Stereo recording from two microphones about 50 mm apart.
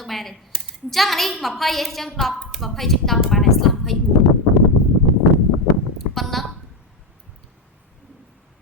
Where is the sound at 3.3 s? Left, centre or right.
Centre.